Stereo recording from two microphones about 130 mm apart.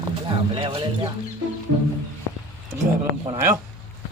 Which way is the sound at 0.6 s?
45° right (ahead or behind).